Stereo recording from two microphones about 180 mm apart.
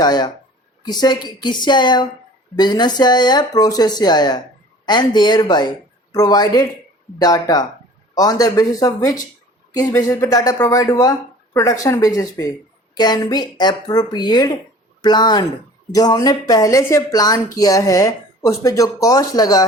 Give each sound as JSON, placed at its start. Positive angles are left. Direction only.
{"t": 0.0, "sound": "speech", "side_deg": 20}